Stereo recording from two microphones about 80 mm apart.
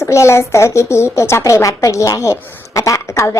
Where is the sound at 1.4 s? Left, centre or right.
Left.